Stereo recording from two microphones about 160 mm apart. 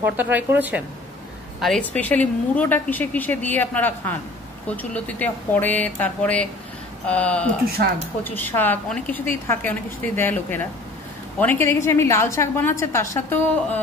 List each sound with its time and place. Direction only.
0.0 s a woman's voice: 10° right (ahead or behind)
1.6 s a woman's voice: 5° left (ahead or behind)